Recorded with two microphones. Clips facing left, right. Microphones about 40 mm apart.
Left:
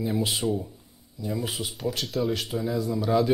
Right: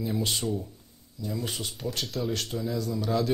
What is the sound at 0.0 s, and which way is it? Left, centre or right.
Speech, centre.